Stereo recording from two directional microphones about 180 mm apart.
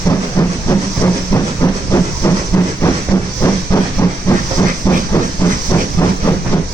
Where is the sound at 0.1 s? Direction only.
20° left (ahead or behind).